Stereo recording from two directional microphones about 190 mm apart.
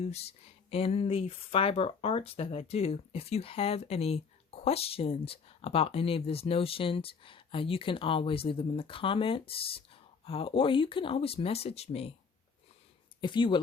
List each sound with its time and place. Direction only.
0.0 s speech: 35° left (ahead or behind)
13.2 s speech: 25° left (ahead or behind)